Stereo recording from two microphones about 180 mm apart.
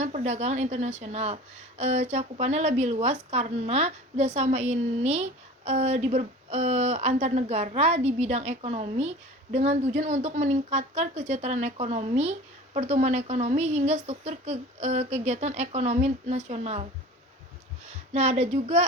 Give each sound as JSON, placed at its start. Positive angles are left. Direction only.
{"t": 0.0, "sound": "speech", "side_deg": -40}
{"t": 18.1, "sound": "speech", "side_deg": -40}